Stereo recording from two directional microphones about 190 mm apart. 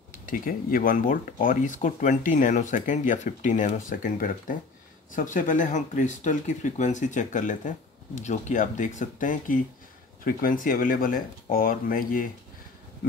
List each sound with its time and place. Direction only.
0.1 s speech: 45° left (ahead or behind)